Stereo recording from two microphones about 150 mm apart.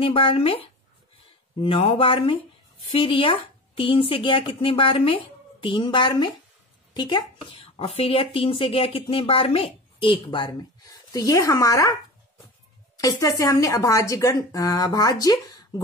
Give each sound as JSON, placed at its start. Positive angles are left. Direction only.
{"t": 0.0, "sound": "speech", "side_deg": 35}
{"t": 12.9, "sound": "speech", "side_deg": 20}